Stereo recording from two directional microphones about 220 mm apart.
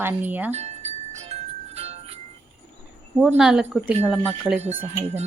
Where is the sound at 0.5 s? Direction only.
30° right (ahead or behind).